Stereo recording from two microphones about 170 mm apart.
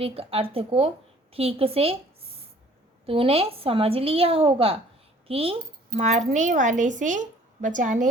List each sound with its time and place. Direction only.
0.0 s a woman's voice: 35° right (ahead or behind)
3.1 s a woman's voice: 35° right (ahead or behind)